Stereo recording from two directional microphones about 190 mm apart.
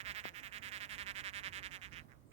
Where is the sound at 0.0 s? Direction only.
35° right (ahead or behind).